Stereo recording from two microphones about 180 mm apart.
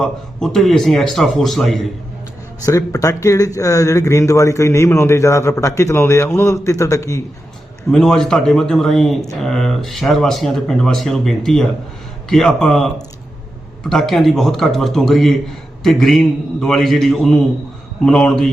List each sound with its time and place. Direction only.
0.0 s speech: centre (ahead or behind)
2.6 s speech: 20° left (ahead or behind)
7.9 s speech: 5° left (ahead or behind)
13.9 s speech: centre (ahead or behind)